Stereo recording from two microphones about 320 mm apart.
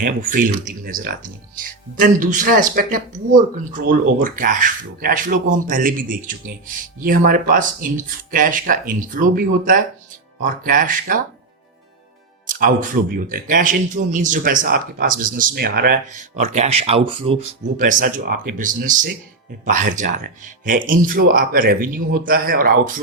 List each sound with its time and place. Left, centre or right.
0.0 s speech: right
12.5 s speech: right